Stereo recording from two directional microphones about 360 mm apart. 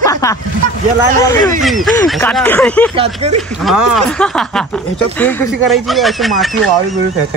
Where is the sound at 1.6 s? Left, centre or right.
Centre.